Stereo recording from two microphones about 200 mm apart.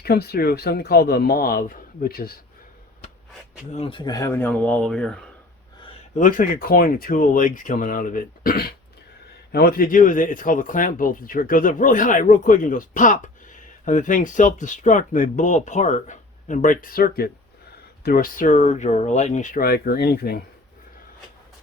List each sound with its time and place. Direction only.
0.0 s speech: 50° left (ahead or behind)
3.8 s speech: 25° left (ahead or behind); by 5.2 s 5° left (ahead or behind)
6.1 s speech: 40° left (ahead or behind)